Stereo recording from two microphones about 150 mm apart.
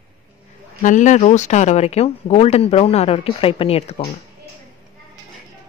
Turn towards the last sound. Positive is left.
turn(degrees=40)  # may be behind; listen again after turning